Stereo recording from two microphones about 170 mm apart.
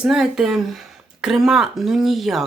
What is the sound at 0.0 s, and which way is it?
Speech, 5° right (ahead or behind).